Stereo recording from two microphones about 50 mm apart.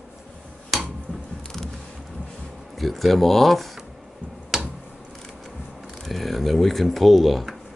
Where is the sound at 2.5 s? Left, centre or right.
Centre.